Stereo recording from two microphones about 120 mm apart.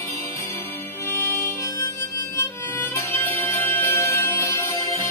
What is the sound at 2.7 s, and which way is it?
Music, 15° left (ahead or behind).